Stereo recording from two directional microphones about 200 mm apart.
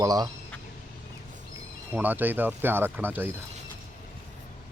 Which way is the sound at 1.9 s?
10° right (ahead or behind).